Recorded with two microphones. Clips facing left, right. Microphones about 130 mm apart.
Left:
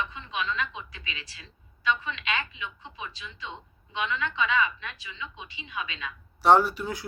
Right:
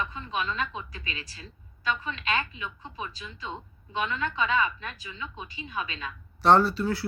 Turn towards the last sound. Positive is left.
turn(degrees=15)  # may be behind; listen again after turning